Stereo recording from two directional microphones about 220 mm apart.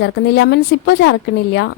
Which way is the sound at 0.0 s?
55° left (ahead or behind).